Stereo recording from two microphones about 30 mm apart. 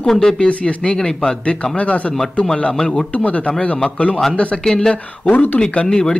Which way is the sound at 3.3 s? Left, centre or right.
Left.